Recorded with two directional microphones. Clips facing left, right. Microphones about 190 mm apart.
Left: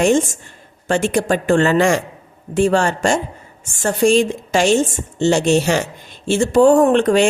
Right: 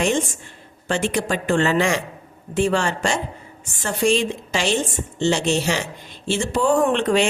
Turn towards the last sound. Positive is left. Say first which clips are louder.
# left 5 dB
turn(degrees=45)  # may be behind; listen again after turning